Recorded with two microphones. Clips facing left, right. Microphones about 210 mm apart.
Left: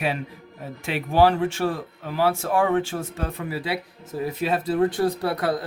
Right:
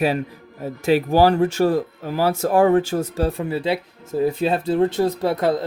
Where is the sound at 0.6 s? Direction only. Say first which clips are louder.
Right 11 dB; 40° right (ahead or behind).